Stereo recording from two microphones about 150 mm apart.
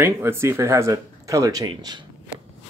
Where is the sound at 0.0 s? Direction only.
15° right (ahead or behind).